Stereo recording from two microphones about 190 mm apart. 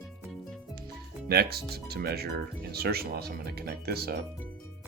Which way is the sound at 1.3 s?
55° right (ahead or behind).